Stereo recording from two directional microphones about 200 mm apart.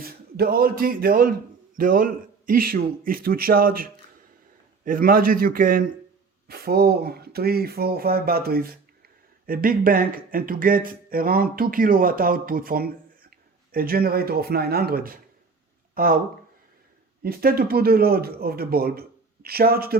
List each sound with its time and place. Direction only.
0.0 s a man's voice: 50° right (ahead or behind)
4.9 s speech: 45° right (ahead or behind)
17.2 s speech: 50° right (ahead or behind)